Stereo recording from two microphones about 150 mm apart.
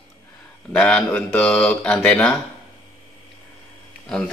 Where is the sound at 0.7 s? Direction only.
5° left (ahead or behind).